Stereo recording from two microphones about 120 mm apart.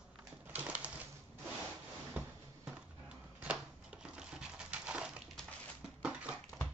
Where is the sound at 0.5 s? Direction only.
10° right (ahead or behind).